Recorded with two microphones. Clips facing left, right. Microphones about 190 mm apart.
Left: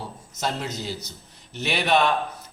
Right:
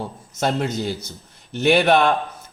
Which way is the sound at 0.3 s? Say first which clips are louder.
Right 7 dB; 55° right (ahead or behind).